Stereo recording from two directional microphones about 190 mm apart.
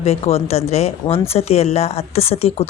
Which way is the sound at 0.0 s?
30° left (ahead or behind).